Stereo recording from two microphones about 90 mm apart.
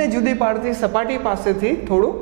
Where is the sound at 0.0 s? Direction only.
20° right (ahead or behind).